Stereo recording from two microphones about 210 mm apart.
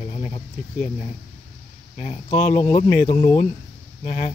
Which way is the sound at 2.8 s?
45° left (ahead or behind).